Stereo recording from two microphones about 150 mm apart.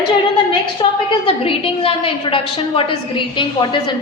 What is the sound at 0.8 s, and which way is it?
A woman's voice, 35° left (ahead or behind).